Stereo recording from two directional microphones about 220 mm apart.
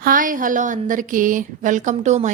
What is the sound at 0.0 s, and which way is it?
A woman's voice, 40° right (ahead or behind).